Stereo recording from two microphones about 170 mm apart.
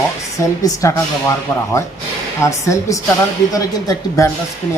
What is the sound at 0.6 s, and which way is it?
Speech, 20° left (ahead or behind).